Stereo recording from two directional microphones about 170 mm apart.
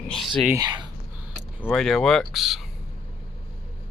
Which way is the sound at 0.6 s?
25° right (ahead or behind).